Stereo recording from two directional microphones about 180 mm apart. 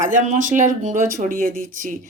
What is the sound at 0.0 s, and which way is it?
Speech, 45° right (ahead or behind).